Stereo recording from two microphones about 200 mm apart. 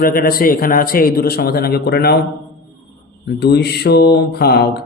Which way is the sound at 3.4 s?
55° left (ahead or behind).